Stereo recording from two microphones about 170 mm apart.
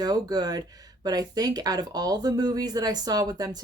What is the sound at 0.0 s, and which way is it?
Speech, 25° right (ahead or behind).